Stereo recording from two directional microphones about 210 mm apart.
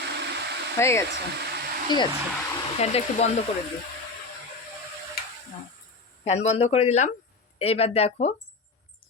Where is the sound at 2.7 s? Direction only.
30° left (ahead or behind).